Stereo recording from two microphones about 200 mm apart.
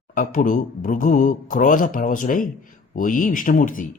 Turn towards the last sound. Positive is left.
turn(degrees=40)  # may be behind; listen again after turning